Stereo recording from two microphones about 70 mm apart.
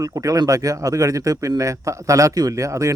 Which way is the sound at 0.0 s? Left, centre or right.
Right.